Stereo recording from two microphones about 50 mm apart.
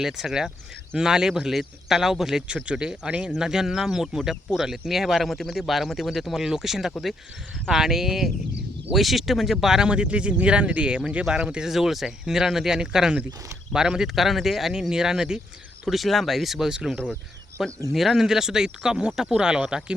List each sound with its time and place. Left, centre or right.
0.0 s speech: centre
2.6 s speech: centre
11.7 s speech: centre